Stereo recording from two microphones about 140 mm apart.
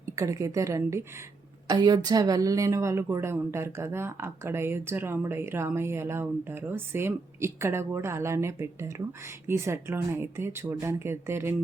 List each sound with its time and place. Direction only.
0.0 s a woman's voice: 20° right (ahead or behind)